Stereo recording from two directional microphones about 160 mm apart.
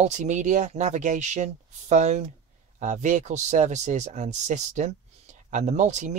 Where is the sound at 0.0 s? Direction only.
50° right (ahead or behind).